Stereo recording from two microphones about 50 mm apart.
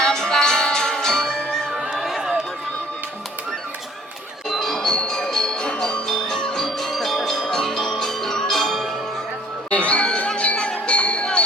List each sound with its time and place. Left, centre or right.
0.0 s music: centre
1.7 s a sound: centre
4.4 s music: centre
9.6 s music: left